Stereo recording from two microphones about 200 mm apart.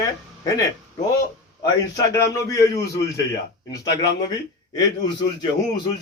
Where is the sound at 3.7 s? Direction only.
20° left (ahead or behind).